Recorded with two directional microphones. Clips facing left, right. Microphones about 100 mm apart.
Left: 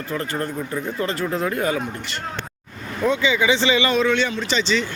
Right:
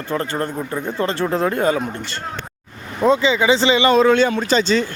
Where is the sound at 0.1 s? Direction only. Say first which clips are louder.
Right 4 dB; 30° right (ahead or behind).